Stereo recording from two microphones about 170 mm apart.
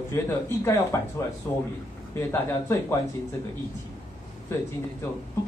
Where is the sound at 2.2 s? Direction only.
15° left (ahead or behind).